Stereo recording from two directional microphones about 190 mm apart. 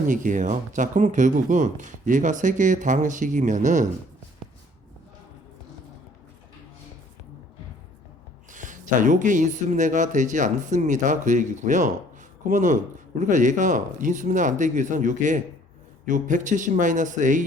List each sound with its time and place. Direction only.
0.1 s speech: 40° right (ahead or behind)
8.4 s speech: 40° right (ahead or behind)